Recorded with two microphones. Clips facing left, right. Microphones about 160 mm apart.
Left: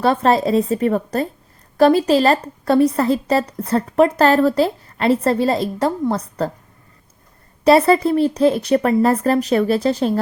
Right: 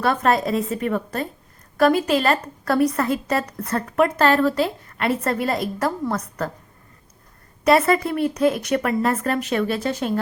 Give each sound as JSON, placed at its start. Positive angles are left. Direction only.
{"t": 0.0, "sound": "speech", "side_deg": 30}
{"t": 7.6, "sound": "speech", "side_deg": 30}